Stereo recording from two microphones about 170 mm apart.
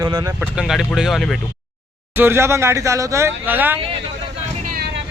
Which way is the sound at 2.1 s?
15° right (ahead or behind).